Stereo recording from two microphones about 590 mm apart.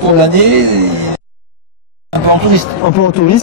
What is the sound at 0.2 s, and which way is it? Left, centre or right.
Speech, right.